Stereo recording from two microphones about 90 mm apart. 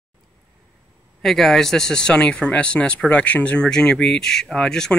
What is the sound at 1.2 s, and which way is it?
Speech, 5° left (ahead or behind).